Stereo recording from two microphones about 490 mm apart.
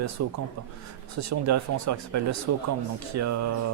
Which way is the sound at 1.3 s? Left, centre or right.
Right.